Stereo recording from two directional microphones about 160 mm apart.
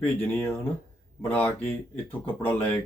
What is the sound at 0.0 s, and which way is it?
Speech, 10° left (ahead or behind).